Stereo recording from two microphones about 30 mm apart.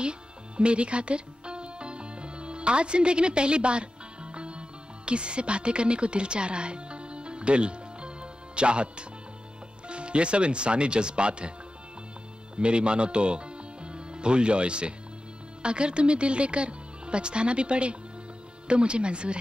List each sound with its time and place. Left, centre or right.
0.0 s music: right
9.8 s speech: right
12.5 s speech: right